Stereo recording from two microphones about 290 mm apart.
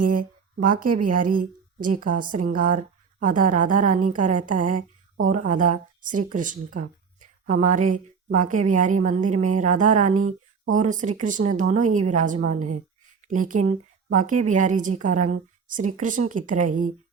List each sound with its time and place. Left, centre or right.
0.5 s a woman's voice: right